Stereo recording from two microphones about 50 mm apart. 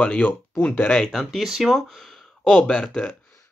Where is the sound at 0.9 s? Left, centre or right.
Centre.